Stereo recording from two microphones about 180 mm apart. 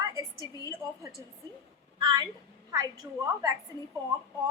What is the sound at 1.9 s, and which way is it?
A woman's voice, 20° right (ahead or behind).